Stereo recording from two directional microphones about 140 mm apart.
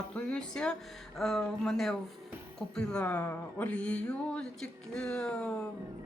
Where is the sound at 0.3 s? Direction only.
5° left (ahead or behind).